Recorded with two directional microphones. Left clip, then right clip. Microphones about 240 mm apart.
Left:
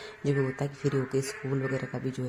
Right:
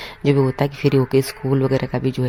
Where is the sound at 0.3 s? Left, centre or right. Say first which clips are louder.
Right 12 dB; right.